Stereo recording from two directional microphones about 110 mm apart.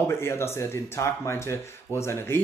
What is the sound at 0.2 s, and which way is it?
Speech, 25° left (ahead or behind).